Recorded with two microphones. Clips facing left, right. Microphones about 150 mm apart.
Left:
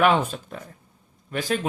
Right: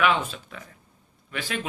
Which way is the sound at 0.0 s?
45° left (ahead or behind).